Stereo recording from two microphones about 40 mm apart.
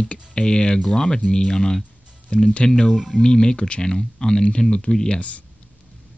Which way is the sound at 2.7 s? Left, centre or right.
Centre.